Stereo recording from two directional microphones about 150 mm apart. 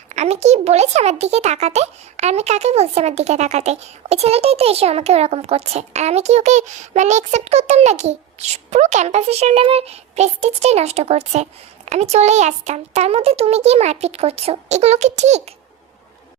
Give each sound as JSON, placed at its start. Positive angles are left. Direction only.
{"t": 0.1, "sound": "a child's voice", "side_deg": -50}